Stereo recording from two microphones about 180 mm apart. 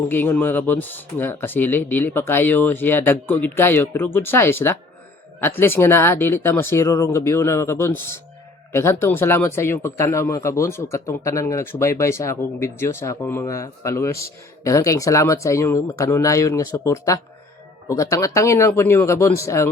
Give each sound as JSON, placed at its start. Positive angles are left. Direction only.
{"t": 0.1, "sound": "speech", "side_deg": 10}